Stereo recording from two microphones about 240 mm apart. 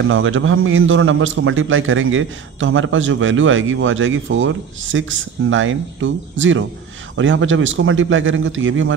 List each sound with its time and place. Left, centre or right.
0.0 s a man's voice: right